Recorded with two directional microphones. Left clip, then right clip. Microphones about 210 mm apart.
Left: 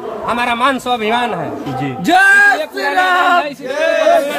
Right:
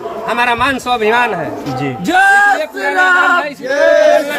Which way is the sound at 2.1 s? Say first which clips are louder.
Even; 45° left (ahead or behind).